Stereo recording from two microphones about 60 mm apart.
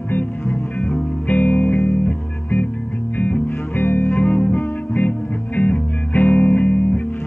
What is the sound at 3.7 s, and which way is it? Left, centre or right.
Music, left.